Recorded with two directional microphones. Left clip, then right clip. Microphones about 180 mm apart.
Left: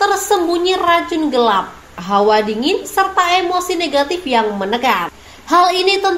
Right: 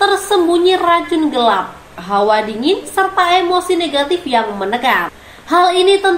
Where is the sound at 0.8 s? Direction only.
40° left (ahead or behind).